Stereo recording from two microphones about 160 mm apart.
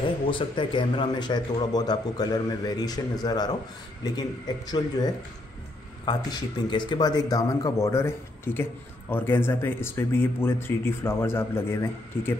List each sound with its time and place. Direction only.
0.3 s a man's voice: 30° left (ahead or behind); by 12.4 s 15° left (ahead or behind)